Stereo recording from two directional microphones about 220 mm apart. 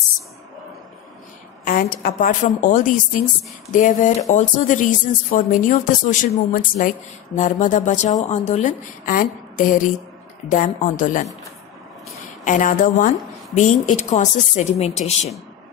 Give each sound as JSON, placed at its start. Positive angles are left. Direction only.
{"t": 1.6, "sound": "speech", "side_deg": 40}
{"t": 12.4, "sound": "speech", "side_deg": 35}